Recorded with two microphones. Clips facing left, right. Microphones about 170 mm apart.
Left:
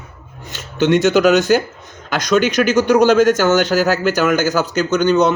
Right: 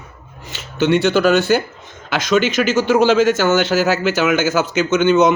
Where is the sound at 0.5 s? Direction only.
45° left (ahead or behind).